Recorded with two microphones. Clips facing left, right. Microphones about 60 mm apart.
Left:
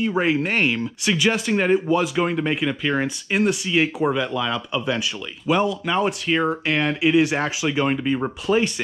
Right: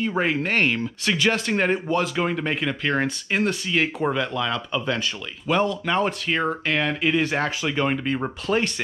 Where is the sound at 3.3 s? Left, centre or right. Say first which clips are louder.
Left 5 dB; centre.